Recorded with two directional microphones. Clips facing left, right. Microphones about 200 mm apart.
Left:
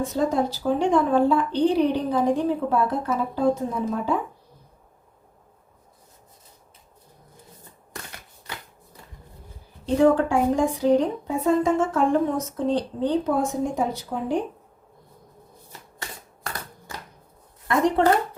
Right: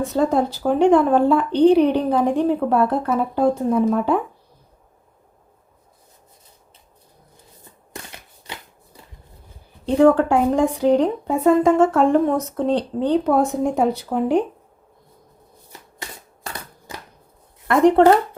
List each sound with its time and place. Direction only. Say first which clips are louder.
0.1 s a woman's voice: right 4 dB; 60° right (ahead or behind)
9.8 s a woman's voice: right 4 dB; 60° right (ahead or behind)
16.9 s a sound: right 3 dB; 20° right (ahead or behind)
17.7 s a woman's voice: right 7 dB; 60° right (ahead or behind)